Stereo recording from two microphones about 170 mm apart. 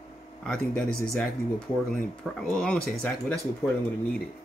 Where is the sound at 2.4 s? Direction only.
5° left (ahead or behind).